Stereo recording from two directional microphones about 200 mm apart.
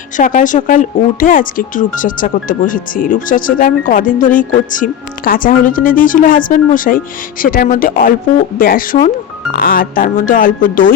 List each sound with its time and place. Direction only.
0.2 s speech: 40° left (ahead or behind)